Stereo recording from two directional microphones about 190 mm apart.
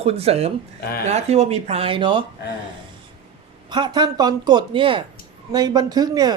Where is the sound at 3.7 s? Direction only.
25° right (ahead or behind).